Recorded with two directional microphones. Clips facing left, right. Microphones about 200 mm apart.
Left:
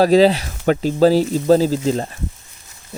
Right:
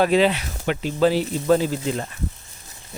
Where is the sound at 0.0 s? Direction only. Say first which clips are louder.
Left 6 dB; 35° left (ahead or behind).